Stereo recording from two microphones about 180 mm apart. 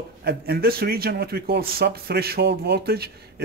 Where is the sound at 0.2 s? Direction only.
60° right (ahead or behind).